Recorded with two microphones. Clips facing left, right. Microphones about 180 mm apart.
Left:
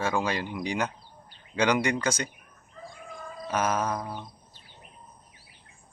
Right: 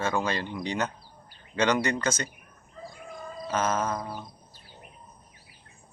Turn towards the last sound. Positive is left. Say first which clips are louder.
# even
turn(degrees=10)  # may be behind; listen again after turning